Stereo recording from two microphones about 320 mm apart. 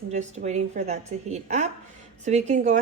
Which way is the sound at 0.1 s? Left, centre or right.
Right.